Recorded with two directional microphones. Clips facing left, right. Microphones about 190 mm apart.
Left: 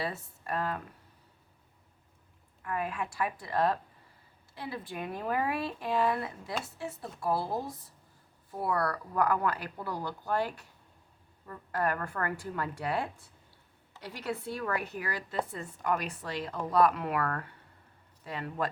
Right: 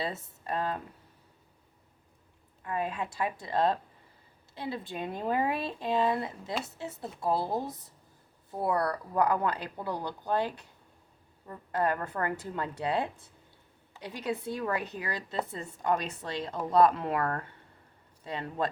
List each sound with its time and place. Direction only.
0.0 s speech: 20° right (ahead or behind)
2.6 s speech: 20° right (ahead or behind)